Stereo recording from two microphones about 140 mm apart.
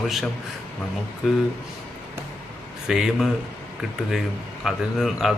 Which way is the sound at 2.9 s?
5° right (ahead or behind).